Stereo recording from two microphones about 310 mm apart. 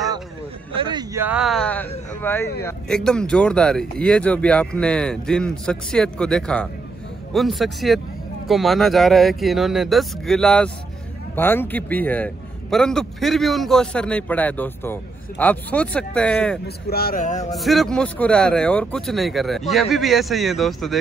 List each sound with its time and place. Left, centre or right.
0.7 s a man's voice: centre
16.6 s speech: left
17.6 s a man's voice: centre